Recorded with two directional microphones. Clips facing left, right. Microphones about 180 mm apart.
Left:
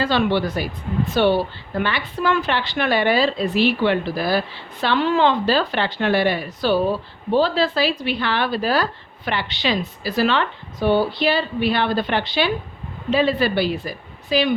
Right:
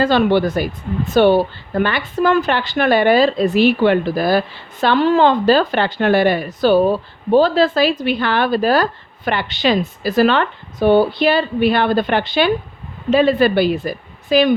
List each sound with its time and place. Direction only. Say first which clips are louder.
0.0 s speech: right 5 dB; 45° right (ahead or behind)